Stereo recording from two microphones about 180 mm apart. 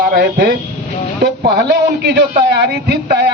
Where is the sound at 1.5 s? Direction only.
65° right (ahead or behind).